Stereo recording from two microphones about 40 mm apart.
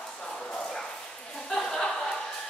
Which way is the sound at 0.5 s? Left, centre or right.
Left.